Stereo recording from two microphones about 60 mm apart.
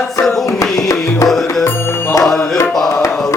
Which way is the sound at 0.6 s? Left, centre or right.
Left.